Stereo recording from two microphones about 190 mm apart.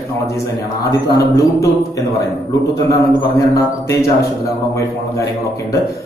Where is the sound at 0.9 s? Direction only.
20° left (ahead or behind).